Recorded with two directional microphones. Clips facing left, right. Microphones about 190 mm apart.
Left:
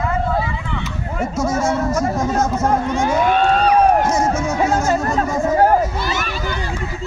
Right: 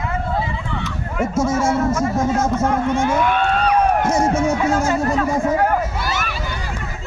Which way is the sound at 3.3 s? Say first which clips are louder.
Left 3 dB; 55° right (ahead or behind).